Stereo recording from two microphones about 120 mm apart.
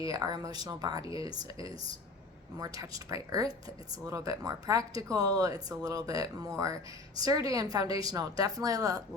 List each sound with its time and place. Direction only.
0.0 s speech: 30° right (ahead or behind)